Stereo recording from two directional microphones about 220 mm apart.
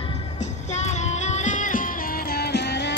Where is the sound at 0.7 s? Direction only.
30° left (ahead or behind).